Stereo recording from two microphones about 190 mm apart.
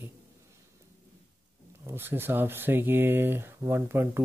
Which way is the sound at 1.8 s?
10° right (ahead or behind).